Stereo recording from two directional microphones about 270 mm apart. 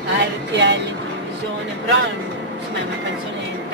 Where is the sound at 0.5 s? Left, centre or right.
Right.